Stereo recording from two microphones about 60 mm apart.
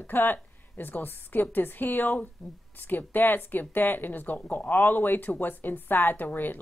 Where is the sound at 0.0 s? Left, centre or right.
Left.